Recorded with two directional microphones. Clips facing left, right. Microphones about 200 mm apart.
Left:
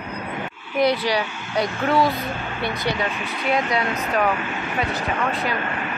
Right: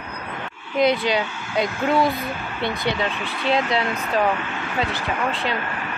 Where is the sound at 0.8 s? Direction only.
20° right (ahead or behind).